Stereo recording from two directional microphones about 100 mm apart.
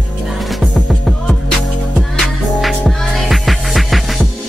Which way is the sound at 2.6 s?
Centre (ahead or behind).